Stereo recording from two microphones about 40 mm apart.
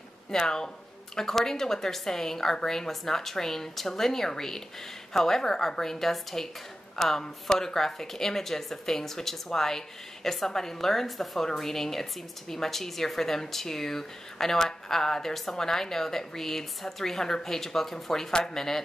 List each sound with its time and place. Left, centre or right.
0.3 s speech: centre